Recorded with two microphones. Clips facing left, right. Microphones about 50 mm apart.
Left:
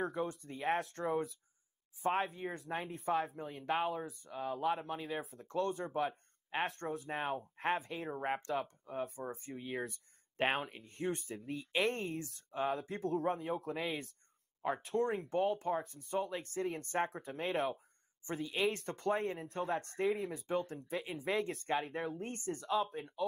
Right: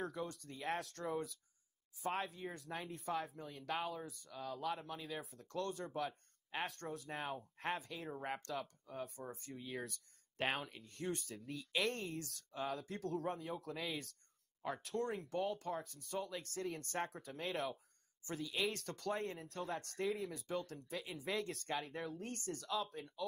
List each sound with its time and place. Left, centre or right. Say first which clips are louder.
0.0 s speech: left 6 dB; centre